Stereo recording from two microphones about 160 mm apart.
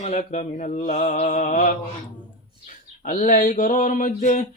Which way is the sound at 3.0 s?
55° left (ahead or behind).